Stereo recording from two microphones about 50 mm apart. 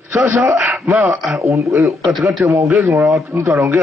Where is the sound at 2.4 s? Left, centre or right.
Right.